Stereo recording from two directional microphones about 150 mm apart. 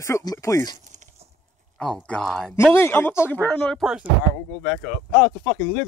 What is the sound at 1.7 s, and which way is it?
Speech, 5° left (ahead or behind).